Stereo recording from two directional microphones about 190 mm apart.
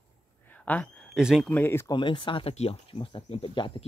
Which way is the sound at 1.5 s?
10° left (ahead or behind).